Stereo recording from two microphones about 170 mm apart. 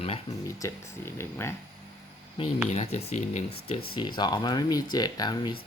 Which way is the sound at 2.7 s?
40° left (ahead or behind).